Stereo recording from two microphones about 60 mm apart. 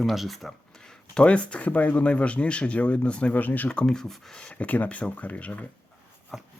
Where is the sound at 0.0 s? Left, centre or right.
Centre; by 3.7 s left.